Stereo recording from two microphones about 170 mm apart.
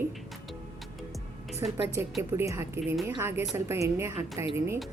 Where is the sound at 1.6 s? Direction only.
15° right (ahead or behind).